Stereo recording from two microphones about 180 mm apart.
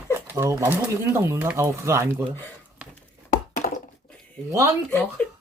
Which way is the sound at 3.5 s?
50° left (ahead or behind).